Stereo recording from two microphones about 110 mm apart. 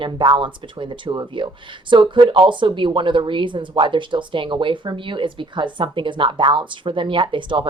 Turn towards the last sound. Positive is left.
turn(degrees=-50)  # may be behind; listen again after turning